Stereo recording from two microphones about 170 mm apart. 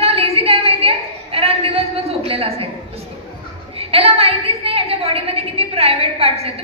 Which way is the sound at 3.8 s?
35° right (ahead or behind).